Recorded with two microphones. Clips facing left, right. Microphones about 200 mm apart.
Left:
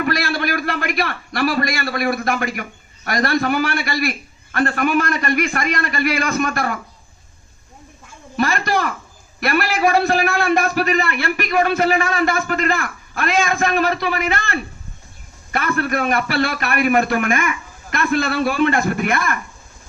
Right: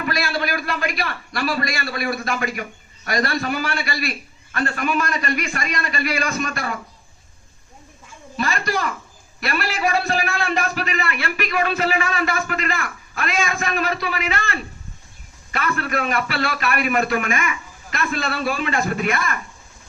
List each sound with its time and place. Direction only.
0.0 s a man's voice: 60° left (ahead or behind)
8.4 s a man's voice: 60° left (ahead or behind)